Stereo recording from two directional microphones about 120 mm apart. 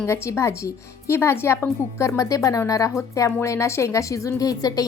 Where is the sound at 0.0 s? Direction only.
20° left (ahead or behind).